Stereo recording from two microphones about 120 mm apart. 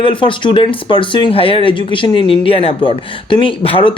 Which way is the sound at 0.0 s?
45° left (ahead or behind).